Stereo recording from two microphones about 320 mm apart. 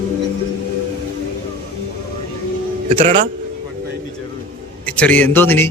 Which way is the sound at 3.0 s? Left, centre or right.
Right.